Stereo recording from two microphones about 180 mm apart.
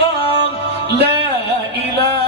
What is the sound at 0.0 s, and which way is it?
Music, 30° left (ahead or behind).